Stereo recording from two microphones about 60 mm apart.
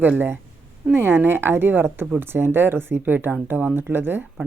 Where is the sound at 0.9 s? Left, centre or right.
Right.